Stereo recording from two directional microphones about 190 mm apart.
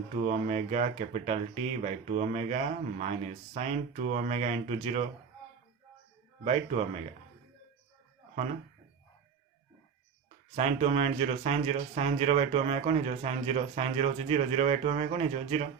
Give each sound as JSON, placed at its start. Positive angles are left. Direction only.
{"t": 0.2, "sound": "speech", "side_deg": -35}
{"t": 6.4, "sound": "speech", "side_deg": -35}
{"t": 10.5, "sound": "speech", "side_deg": -35}